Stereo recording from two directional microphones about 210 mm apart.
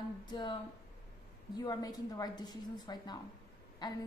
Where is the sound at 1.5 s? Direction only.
20° left (ahead or behind).